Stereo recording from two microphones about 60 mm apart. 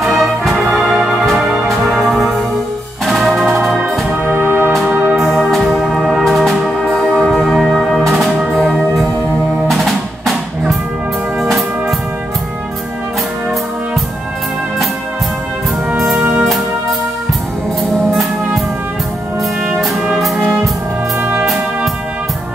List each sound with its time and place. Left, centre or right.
0.1 s music: centre
4.3 s music: right
5.1 s music: centre
8.1 s music: centre
16.0 s brass instrument: centre
20.2 s brass instrument: centre
21.2 s music: right